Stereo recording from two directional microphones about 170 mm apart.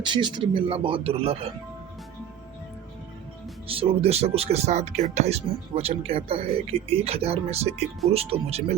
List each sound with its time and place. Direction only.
0.0 s speech: 25° right (ahead or behind)
3.7 s speech: 35° right (ahead or behind)